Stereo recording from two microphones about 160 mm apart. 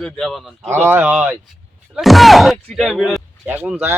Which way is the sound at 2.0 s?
Centre (ahead or behind).